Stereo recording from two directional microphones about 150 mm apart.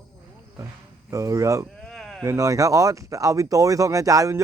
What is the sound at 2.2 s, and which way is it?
Speech, 20° right (ahead or behind).